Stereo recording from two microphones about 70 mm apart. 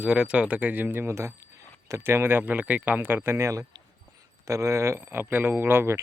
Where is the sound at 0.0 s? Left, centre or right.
Centre.